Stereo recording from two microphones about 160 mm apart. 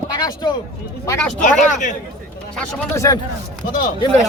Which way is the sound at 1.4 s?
50° left (ahead or behind).